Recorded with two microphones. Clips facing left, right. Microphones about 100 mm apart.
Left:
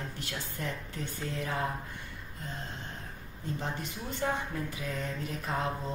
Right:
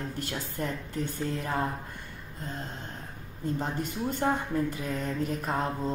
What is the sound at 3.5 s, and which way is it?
Speech, 50° right (ahead or behind).